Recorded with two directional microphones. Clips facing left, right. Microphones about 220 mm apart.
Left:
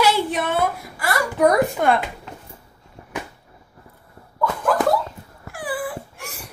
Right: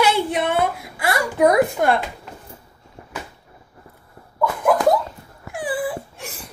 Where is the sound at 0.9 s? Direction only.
20° right (ahead or behind).